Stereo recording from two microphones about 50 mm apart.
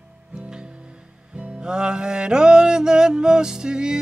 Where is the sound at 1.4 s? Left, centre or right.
Centre.